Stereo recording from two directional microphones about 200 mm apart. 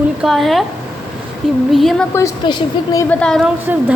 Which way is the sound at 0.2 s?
Centre (ahead or behind).